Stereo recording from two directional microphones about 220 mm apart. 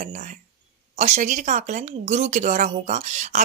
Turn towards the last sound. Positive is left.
turn(degrees=-35)  # may be behind; listen again after turning